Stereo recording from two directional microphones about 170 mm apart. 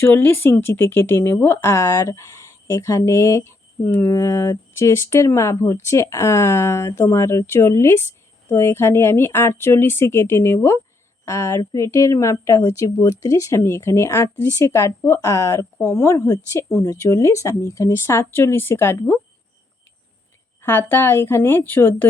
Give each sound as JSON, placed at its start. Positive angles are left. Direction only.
{"t": 0.0, "sound": "speech", "side_deg": 10}
{"t": 20.6, "sound": "speech", "side_deg": 10}